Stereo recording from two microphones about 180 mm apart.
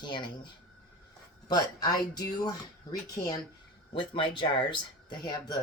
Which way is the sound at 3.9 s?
30° left (ahead or behind).